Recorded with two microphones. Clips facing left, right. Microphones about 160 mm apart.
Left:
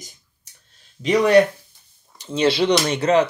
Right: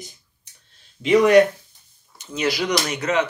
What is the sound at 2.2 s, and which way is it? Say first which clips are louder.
Speech: left 5 dB; 30° left (ahead or behind).